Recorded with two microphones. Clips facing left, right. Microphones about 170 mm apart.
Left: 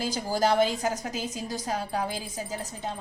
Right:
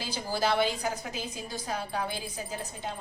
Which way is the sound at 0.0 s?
45° left (ahead or behind).